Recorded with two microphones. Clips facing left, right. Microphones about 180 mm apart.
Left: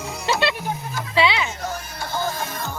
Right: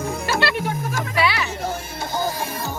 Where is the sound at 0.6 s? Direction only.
80° right.